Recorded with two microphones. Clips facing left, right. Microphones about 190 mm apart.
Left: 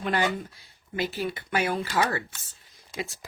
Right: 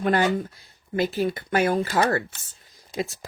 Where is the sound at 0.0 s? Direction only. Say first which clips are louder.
Right 5 dB; 45° right (ahead or behind).